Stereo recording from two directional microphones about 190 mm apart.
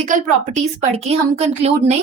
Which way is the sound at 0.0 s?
35° right (ahead or behind).